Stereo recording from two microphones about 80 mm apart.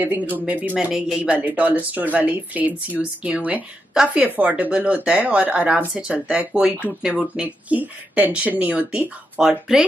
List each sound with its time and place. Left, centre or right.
0.0 s speech: right
0.7 s speech: centre
7.4 s speech: centre
9.4 s speech: centre